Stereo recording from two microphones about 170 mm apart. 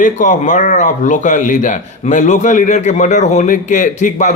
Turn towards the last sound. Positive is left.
turn(degrees=45)  # may be behind; listen again after turning